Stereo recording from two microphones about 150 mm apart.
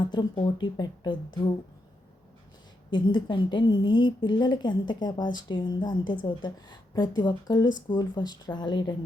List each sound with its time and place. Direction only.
0.0 s speech: 30° left (ahead or behind)
2.9 s a woman's voice: 30° left (ahead or behind)